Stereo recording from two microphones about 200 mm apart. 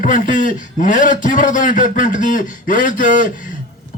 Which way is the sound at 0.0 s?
40° left (ahead or behind).